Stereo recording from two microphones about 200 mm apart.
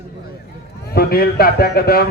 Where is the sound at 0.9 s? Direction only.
50° left (ahead or behind).